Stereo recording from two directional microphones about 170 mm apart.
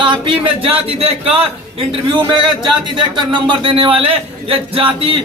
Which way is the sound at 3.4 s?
30° right (ahead or behind).